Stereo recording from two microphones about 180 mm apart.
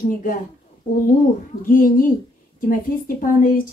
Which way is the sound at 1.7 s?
50° left (ahead or behind).